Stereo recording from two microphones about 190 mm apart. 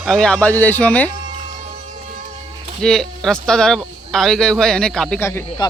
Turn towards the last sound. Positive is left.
turn(degrees=15)  # may be behind; listen again after turning